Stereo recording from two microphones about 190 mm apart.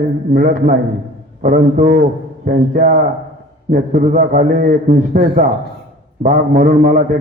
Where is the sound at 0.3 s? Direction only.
50° right (ahead or behind).